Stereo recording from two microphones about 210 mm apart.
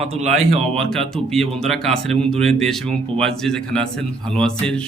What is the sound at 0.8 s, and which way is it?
Speech, centre (ahead or behind).